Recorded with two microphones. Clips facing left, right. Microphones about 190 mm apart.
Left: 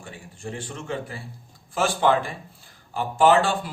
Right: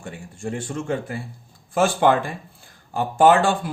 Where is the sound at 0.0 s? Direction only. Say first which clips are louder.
Right 5 dB; 45° right (ahead or behind).